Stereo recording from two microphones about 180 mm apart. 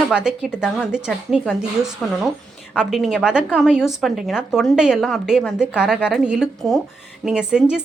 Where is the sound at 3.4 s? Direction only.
5° left (ahead or behind).